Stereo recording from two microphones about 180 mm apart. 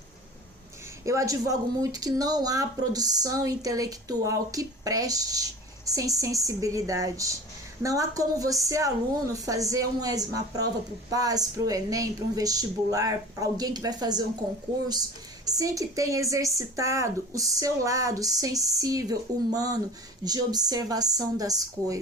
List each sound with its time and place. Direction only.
1.0 s speech: 15° right (ahead or behind)
15.4 s speech: 20° right (ahead or behind)